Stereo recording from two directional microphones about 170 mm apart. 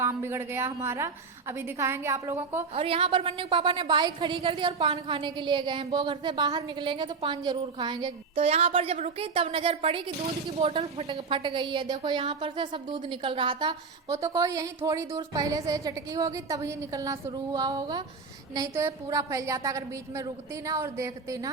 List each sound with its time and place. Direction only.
0.0 s a woman's voice: 15° right (ahead or behind)
2.7 s a woman's voice: 35° right (ahead or behind)